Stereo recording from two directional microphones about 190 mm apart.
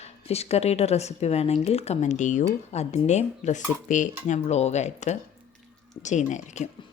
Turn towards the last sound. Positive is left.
turn(degrees=40)  # may be behind; listen again after turning